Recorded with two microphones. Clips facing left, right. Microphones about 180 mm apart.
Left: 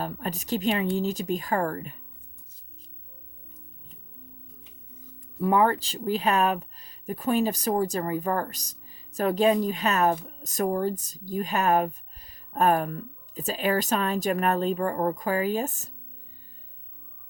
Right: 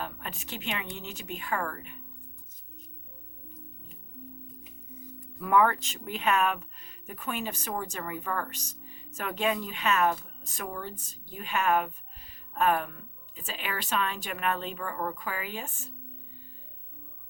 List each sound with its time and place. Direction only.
0.0 s speech: 40° left (ahead or behind)
5.4 s speech: 30° left (ahead or behind)